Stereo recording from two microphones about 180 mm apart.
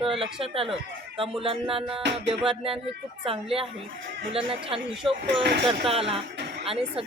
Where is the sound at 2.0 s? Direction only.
75° right (ahead or behind).